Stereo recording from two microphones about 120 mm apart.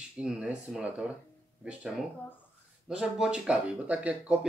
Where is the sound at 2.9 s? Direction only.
5° right (ahead or behind).